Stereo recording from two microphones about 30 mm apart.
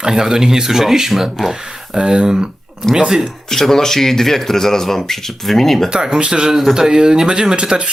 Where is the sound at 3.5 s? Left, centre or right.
Centre.